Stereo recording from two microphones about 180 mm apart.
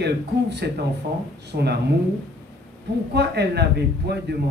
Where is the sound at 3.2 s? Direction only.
65° right (ahead or behind).